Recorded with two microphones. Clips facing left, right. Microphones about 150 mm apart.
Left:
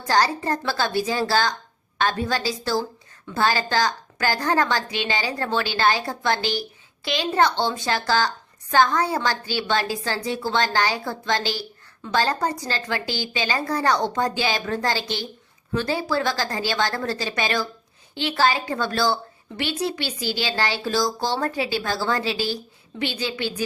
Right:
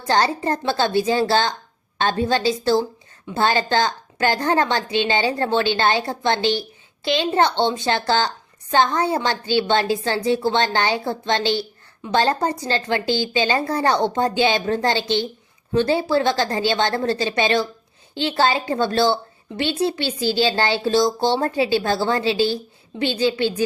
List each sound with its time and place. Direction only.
0.1 s a woman's voice: 25° right (ahead or behind)